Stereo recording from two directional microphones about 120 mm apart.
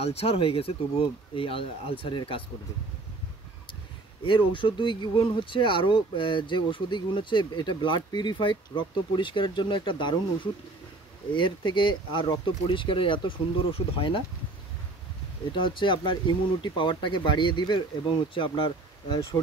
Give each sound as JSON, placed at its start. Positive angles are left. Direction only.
{"t": 0.0, "sound": "speech", "side_deg": 55}
{"t": 4.2, "sound": "speech", "side_deg": 45}
{"t": 15.5, "sound": "speech", "side_deg": 45}